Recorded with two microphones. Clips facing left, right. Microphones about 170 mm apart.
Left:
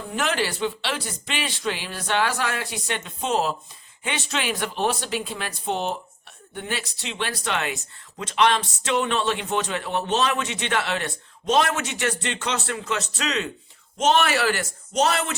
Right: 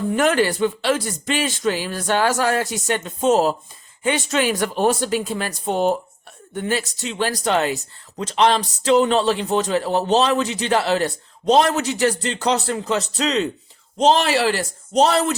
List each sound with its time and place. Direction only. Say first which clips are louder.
0.2 s a man's voice: right 6 dB; 50° right (ahead or behind)